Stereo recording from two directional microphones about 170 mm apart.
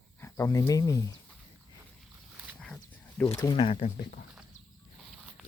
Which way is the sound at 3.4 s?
20° left (ahead or behind).